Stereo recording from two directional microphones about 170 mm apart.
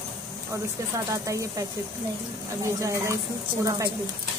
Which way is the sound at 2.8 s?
20° right (ahead or behind).